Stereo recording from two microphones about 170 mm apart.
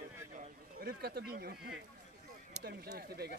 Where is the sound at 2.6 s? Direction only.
70° right (ahead or behind).